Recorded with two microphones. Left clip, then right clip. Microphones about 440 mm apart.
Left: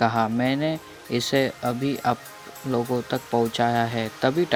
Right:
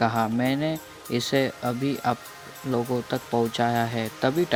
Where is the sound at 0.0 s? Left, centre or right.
Right.